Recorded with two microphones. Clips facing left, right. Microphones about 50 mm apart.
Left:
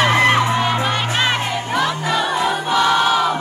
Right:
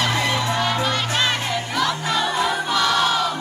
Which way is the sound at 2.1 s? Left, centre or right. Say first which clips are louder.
Left 3 dB; centre.